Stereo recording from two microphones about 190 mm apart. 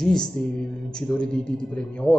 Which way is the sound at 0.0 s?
5° left (ahead or behind).